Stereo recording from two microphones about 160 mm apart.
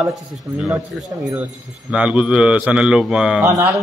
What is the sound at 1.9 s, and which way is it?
Speech, 5° right (ahead or behind).